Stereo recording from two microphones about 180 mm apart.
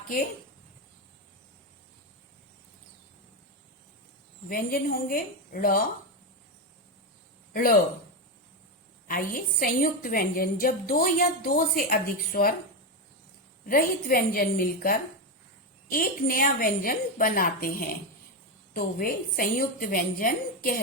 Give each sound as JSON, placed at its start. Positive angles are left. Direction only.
{"t": 4.4, "sound": "a woman's voice", "side_deg": 55}
{"t": 7.5, "sound": "speech", "side_deg": 55}
{"t": 9.0, "sound": "a woman's voice", "side_deg": 55}
{"t": 13.7, "sound": "a woman's voice", "side_deg": 55}